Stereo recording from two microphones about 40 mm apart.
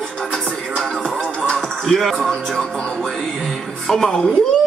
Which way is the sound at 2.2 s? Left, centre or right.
Centre.